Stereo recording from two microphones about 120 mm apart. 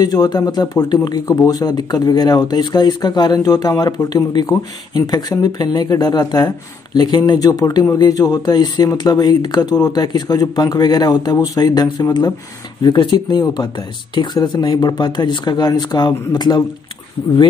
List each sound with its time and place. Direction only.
0.0 s speech: 35° left (ahead or behind)